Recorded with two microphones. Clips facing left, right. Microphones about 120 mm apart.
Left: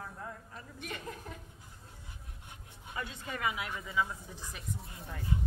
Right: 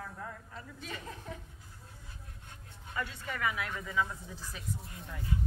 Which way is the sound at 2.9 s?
20° left (ahead or behind).